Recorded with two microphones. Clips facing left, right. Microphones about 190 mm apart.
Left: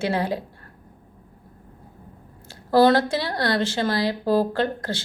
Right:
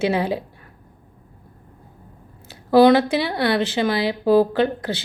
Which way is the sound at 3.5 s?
20° right (ahead or behind).